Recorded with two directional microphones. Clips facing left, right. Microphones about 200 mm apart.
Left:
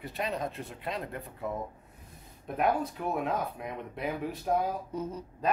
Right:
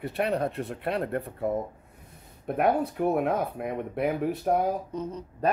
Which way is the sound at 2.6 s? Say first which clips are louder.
Right 5 dB; 60° right (ahead or behind).